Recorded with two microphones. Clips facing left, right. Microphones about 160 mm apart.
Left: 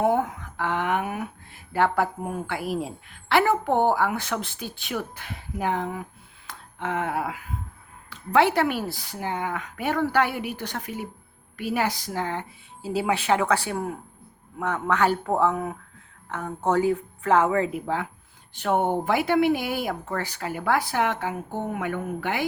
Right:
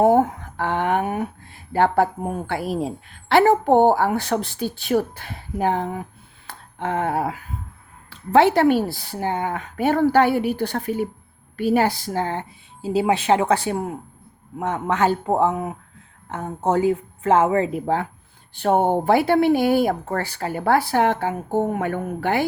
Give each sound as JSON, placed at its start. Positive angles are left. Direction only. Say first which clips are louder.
{"t": 0.0, "sound": "a sound", "louder": "right 7 dB", "side_deg": -40}
{"t": 1.7, "sound": "a woman's voice", "louder": "right 5 dB", "side_deg": -30}
{"t": 12.8, "sound": "a woman's voice", "louder": "right 5 dB", "side_deg": -20}